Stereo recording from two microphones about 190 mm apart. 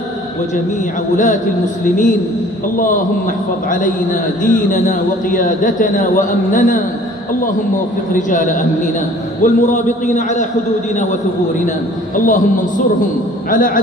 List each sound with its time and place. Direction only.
1.1 s a man's voice: 40° left (ahead or behind)
3.7 s a man's voice: 45° left (ahead or behind)
8.1 s a man's voice: 45° left (ahead or behind)
12.3 s a man's voice: 45° left (ahead or behind)